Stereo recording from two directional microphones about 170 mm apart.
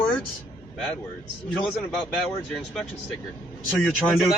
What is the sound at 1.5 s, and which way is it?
A man's voice, 5° left (ahead or behind).